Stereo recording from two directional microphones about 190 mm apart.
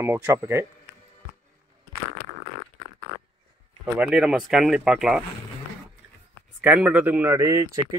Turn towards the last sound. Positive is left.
turn(degrees=-20)  # may be behind; listen again after turning